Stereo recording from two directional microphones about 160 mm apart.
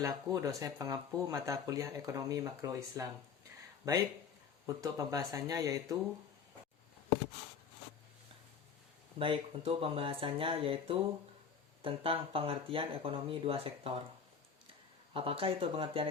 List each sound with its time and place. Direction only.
0.0 s speech: 20° right (ahead or behind)
4.6 s speech: 20° right (ahead or behind)
9.1 s speech: 35° right (ahead or behind)
15.1 s speech: 35° right (ahead or behind)